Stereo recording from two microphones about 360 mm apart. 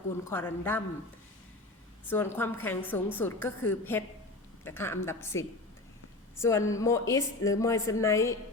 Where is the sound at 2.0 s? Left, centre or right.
Centre.